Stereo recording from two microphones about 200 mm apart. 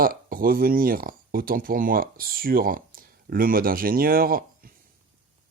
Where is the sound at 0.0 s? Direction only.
45° right (ahead or behind).